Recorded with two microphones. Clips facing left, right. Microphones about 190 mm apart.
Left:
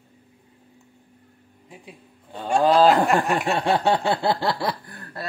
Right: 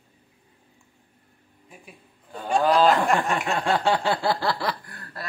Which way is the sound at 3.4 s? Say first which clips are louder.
Left 2 dB; 25° left (ahead or behind).